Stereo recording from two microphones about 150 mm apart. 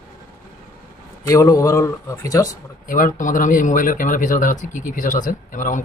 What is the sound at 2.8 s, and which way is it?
Speech, 65° left (ahead or behind).